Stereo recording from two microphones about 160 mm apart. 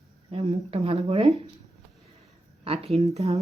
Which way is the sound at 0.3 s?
35° right (ahead or behind).